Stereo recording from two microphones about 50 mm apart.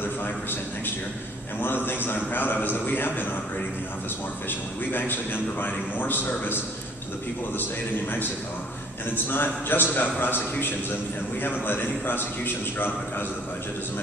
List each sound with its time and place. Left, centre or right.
0.0 s a sound: left
1.6 s a man's voice: left
4.5 s a man's voice: left
9.1 s a man's voice: left